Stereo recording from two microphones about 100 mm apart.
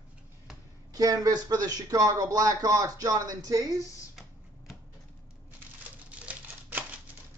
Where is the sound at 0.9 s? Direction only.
35° right (ahead or behind).